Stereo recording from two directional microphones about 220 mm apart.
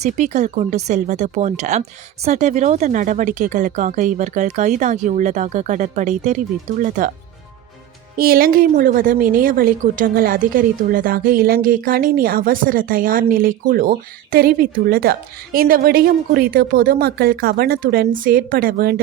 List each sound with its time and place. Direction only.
0.0 s a woman's voice: 30° right (ahead or behind)
8.1 s a woman's voice: 40° right (ahead or behind)